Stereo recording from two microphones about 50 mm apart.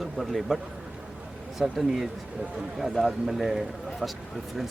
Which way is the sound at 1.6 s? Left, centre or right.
Centre.